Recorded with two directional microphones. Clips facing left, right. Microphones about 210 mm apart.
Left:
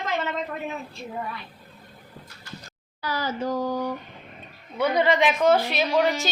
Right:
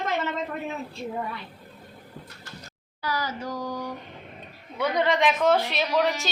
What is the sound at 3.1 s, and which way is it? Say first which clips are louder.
Speech: left 3 dB; 25° left (ahead or behind).